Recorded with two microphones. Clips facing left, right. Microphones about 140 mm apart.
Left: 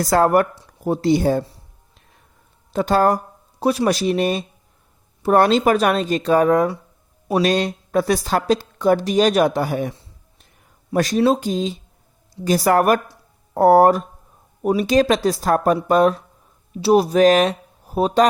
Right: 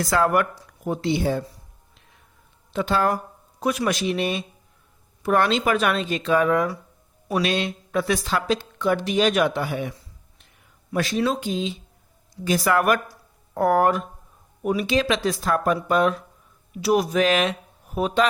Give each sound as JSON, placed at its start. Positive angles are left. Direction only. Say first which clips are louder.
{"t": 0.0, "sound": "speech", "louder": "left 5 dB", "side_deg": 40}
{"t": 0.5, "sound": "speech", "louder": "left 5 dB", "side_deg": 30}
{"t": 2.7, "sound": "speech", "louder": "left 5 dB", "side_deg": 40}
{"t": 10.9, "sound": "speech", "louder": "left 6 dB", "side_deg": 40}
{"t": 13.1, "sound": "a sound", "louder": "even", "side_deg": 35}
{"t": 14.6, "sound": "speech", "louder": "left 6 dB", "side_deg": 35}